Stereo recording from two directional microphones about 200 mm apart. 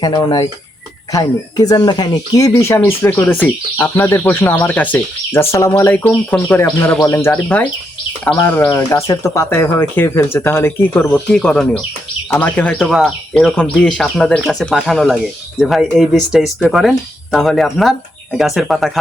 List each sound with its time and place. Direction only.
0.0 s speech: 20° left (ahead or behind); by 18.9 s centre (ahead or behind)